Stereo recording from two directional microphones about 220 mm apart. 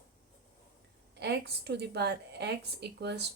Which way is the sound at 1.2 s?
50° right (ahead or behind).